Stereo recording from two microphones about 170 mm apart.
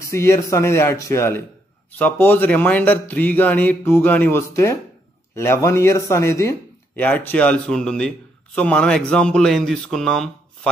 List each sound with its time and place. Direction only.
0.0 s a man's voice: 15° left (ahead or behind)